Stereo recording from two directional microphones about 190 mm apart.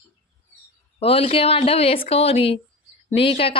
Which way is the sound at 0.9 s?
30° left (ahead or behind).